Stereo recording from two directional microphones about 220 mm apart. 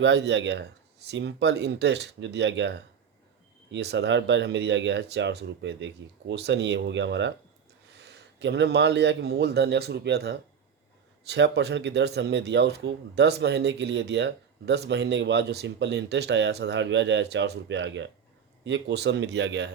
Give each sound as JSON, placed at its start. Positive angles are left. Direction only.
{"t": 0.0, "sound": "a man's voice", "side_deg": -50}